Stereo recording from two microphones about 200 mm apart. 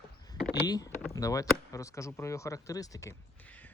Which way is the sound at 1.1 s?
15° left (ahead or behind).